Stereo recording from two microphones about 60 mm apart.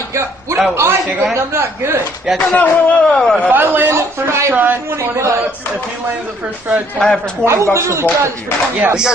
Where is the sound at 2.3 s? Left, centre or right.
Left.